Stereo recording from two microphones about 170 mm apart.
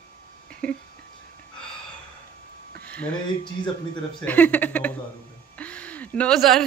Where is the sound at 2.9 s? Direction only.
5° left (ahead or behind).